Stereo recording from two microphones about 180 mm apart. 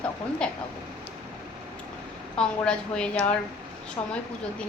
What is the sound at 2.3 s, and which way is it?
A woman's voice, 5° left (ahead or behind).